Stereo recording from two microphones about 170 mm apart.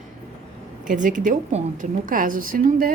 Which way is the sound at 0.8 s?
50° right (ahead or behind).